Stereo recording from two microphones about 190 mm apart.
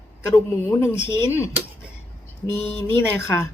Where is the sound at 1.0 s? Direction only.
15° left (ahead or behind).